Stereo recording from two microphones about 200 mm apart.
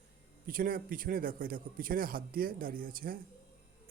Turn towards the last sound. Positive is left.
turn(degrees=-45)  # may be behind; listen again after turning